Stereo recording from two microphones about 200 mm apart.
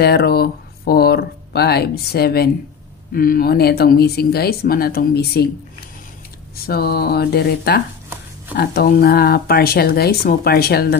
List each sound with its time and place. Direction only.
0.0 s speech: 55° left (ahead or behind)
6.5 s speech: 50° left (ahead or behind)